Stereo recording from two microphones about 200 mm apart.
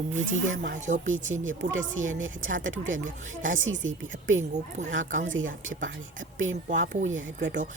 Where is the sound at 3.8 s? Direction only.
75° right (ahead or behind).